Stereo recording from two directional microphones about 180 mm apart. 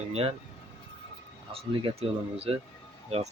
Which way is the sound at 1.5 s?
30° right (ahead or behind).